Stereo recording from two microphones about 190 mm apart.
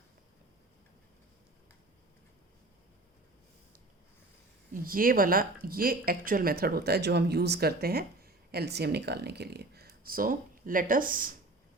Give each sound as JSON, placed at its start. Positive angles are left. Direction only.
{"t": 4.7, "sound": "a woman's voice", "side_deg": -50}